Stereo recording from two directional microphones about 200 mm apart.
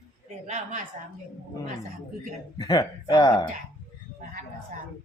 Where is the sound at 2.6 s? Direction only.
20° left (ahead or behind).